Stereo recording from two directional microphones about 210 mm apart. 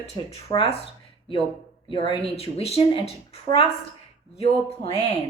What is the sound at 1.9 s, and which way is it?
A woman's voice, 25° left (ahead or behind).